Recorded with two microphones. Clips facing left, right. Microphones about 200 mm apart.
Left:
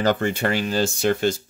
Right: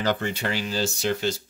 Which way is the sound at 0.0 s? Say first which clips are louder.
Left 5 dB; 50° left (ahead or behind).